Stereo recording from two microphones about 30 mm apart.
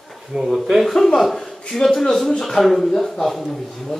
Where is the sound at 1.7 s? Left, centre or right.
Centre.